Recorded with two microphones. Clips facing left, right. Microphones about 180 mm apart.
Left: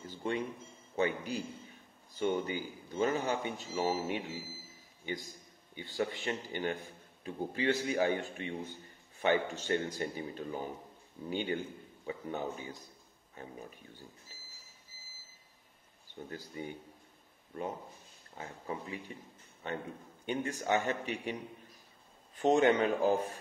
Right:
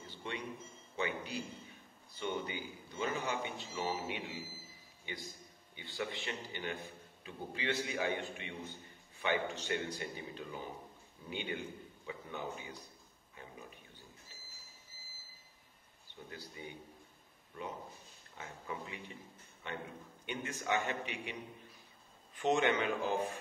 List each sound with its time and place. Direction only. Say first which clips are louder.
0.0 s cash register: left 8 dB; 45° left (ahead or behind)
0.9 s a man's voice: left 6 dB; 45° left (ahead or behind)
16.3 s a man's voice: left 6 dB; 45° left (ahead or behind)
18.4 s a man's voice: left 4 dB; 35° left (ahead or behind)